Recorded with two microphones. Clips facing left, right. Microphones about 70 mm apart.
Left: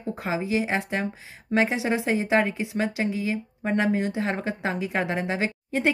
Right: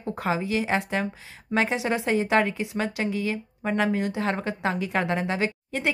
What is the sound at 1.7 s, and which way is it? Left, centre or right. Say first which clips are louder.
Speech: even; centre.